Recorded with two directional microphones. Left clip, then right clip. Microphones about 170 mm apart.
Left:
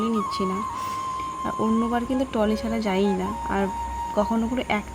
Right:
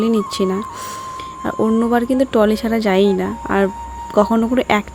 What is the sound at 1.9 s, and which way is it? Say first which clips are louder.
Speech: right 9 dB; 40° right (ahead or behind).